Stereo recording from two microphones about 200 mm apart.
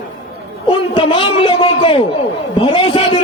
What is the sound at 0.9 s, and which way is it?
A man's voice, 25° left (ahead or behind).